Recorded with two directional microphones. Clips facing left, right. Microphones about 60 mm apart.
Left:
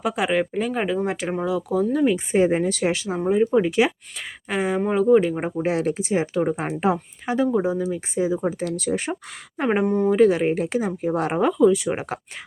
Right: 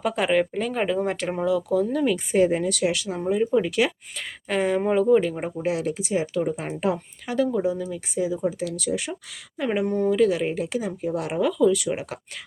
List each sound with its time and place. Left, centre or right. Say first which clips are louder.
0.0 s a woman's voice: even; centre; by 3.9 s left
4.4 s speech: even; centre
5.4 s a woman's voice: left 3 dB; left
9.8 s speech: left 1 dB; centre
10.1 s a woman's voice: left 5 dB; left